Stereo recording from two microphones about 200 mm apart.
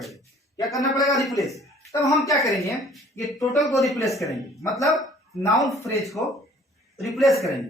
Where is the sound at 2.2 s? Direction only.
15° left (ahead or behind).